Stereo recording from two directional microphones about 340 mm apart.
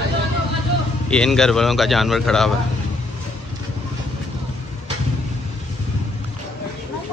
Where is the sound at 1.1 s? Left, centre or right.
Centre.